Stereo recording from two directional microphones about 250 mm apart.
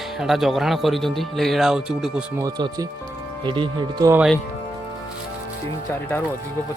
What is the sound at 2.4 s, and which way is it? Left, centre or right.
Speech, centre.